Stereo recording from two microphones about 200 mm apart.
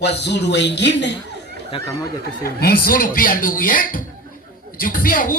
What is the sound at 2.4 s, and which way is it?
Speech, 50° left (ahead or behind).